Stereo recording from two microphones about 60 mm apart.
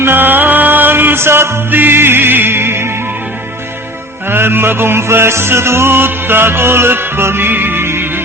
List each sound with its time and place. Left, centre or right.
0.0 s music: right
4.3 s music: right